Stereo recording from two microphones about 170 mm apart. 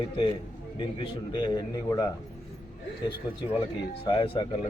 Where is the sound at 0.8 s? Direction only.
30° left (ahead or behind).